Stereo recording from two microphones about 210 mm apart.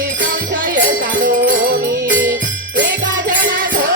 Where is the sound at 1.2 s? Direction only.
40° right (ahead or behind).